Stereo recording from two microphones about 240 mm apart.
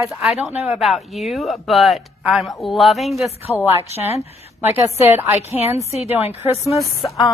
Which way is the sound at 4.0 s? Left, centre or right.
Left.